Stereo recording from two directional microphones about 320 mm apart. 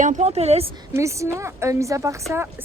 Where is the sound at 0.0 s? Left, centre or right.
Right.